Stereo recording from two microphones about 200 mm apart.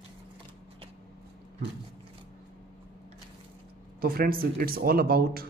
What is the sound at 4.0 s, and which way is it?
Speech, 45° right (ahead or behind).